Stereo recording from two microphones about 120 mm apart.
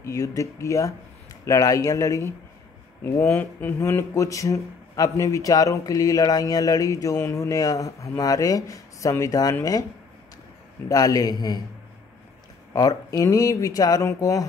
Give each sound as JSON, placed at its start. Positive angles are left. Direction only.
{"t": 0.0, "sound": "speech", "side_deg": 25}
{"t": 10.9, "sound": "a man's voice", "side_deg": 30}
{"t": 12.7, "sound": "speech", "side_deg": 30}